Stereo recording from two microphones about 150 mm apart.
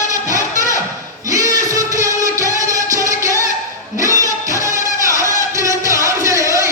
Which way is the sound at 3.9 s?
20° right (ahead or behind).